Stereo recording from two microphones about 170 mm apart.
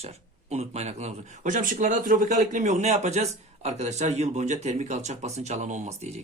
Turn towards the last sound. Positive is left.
turn(degrees=-40)  # may be behind; listen again after turning